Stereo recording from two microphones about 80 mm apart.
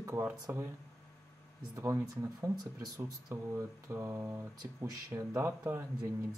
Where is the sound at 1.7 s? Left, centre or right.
Right.